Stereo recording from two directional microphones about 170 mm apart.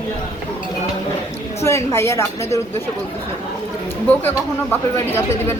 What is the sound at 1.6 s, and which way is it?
Speech, 15° left (ahead or behind).